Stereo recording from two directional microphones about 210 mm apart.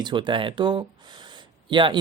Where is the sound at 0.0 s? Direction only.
20° right (ahead or behind).